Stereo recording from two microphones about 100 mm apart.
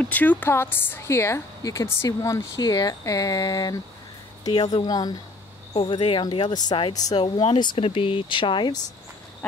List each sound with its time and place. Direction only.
0.0 s a woman's voice: 15° left (ahead or behind); by 5.1 s 40° left (ahead or behind)
5.7 s a woman's voice: 60° left (ahead or behind); by 7.2 s 40° left (ahead or behind)
7.2 s speech: 50° left (ahead or behind)
7.7 s speech: 65° left (ahead or behind); by 8.8 s 50° left (ahead or behind)
9.4 s duck: 15° left (ahead or behind)